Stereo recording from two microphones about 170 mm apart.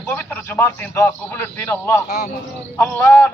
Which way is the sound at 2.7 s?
10° left (ahead or behind).